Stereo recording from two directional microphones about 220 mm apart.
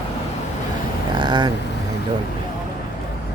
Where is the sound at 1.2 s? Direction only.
20° right (ahead or behind).